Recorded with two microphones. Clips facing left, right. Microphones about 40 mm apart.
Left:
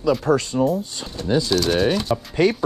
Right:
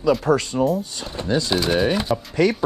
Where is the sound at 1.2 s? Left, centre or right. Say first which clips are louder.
Left 1 dB; right.